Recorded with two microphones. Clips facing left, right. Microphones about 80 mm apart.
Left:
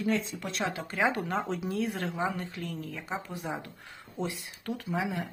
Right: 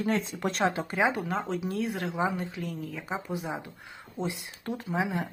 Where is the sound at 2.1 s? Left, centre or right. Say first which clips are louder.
Right 3 dB; centre.